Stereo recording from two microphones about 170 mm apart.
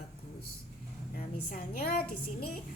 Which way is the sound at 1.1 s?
55° left (ahead or behind).